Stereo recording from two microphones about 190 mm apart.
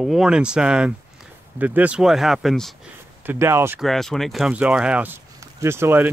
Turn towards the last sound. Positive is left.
turn(degrees=-10)  # may be behind; listen again after turning